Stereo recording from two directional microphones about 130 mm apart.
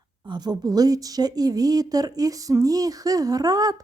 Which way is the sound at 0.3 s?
30° right (ahead or behind).